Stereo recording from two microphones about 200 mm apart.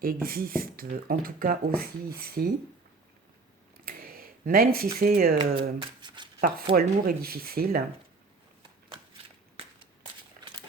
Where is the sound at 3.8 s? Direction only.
45° right (ahead or behind).